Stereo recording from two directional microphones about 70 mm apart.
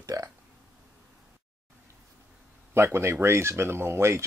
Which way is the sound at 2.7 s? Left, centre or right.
Right.